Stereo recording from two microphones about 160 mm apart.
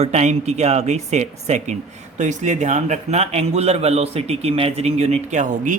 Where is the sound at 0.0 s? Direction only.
45° right (ahead or behind).